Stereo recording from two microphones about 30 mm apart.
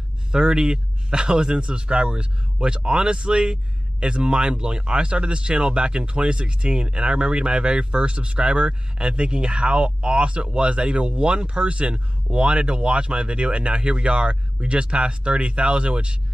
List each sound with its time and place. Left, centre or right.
0.3 s speech: right